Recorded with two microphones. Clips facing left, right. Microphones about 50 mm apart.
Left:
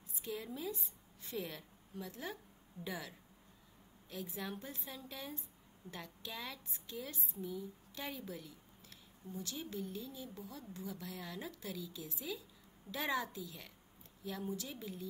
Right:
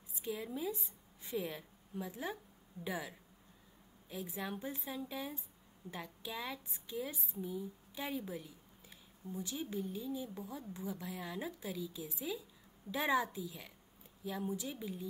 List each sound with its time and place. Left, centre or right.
0.1 s a woman's voice: centre